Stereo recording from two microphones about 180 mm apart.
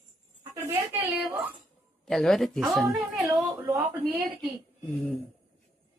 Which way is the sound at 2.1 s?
Centre (ahead or behind).